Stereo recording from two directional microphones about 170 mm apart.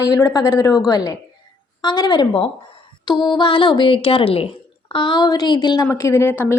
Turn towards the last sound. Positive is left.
turn(degrees=15)  # may be behind; listen again after turning